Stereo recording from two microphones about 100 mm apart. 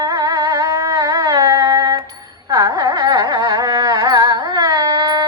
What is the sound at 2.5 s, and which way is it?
Carnatic music, 40° right (ahead or behind).